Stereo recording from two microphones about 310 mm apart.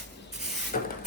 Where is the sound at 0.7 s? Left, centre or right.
Left.